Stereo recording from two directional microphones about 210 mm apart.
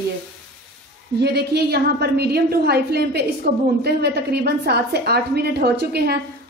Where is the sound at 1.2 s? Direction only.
50° right (ahead or behind).